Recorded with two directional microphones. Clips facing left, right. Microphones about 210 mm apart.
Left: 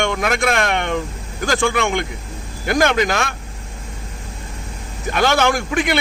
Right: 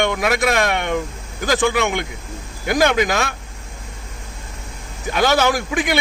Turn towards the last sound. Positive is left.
turn(degrees=-5)  # may be behind; listen again after turning